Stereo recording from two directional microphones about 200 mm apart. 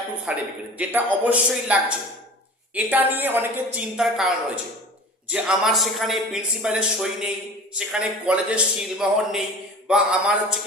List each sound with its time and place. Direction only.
0.3 s a woman's voice: 5° right (ahead or behind)